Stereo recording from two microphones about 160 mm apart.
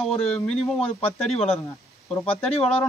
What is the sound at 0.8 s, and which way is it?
Speech, 40° left (ahead or behind).